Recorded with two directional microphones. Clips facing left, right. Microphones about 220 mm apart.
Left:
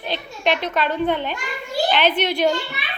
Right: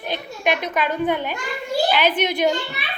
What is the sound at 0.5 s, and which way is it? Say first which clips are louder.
A woman's voice: left 1 dB; 15° right (ahead or behind).